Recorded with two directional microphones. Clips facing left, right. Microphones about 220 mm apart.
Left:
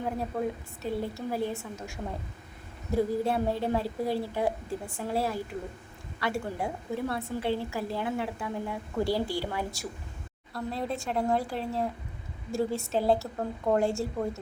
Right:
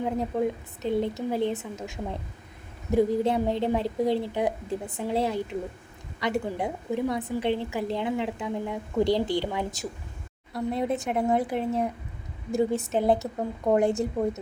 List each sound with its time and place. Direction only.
0.0 s a woman's voice: 20° right (ahead or behind)